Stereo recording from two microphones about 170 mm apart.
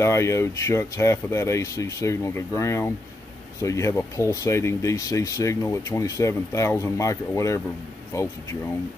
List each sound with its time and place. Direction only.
0.0 s speech: 15° left (ahead or behind)